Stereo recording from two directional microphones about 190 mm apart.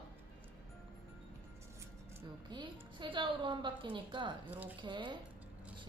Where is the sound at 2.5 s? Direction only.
25° right (ahead or behind).